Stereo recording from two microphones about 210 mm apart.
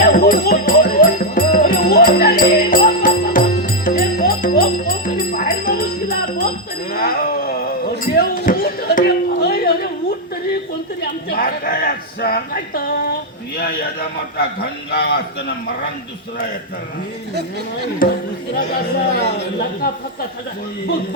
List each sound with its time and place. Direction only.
0.0 s music: 45° left (ahead or behind)
6.9 s a sound: 45° left (ahead or behind)
8.0 s music: 45° left (ahead or behind)
11.0 s chatter: 45° left (ahead or behind)
12.2 s a sound: 45° left (ahead or behind)
14.3 s a man's voice: 50° left (ahead or behind)
18.5 s a man's voice: 45° left (ahead or behind)